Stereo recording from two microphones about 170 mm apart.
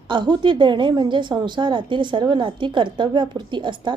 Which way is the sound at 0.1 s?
30° right (ahead or behind).